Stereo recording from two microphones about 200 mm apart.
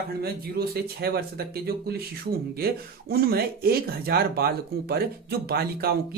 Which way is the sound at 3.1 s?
50° right (ahead or behind).